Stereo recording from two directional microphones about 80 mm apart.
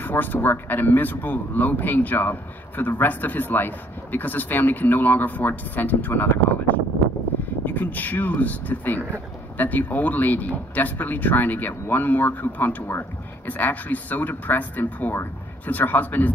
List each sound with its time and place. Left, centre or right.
0.0 s speech: left
7.6 s speech: left